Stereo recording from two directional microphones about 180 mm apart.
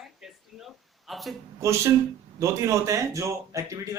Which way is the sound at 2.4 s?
15° right (ahead or behind).